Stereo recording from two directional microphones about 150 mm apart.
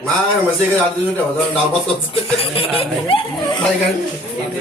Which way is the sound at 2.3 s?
40° left (ahead or behind).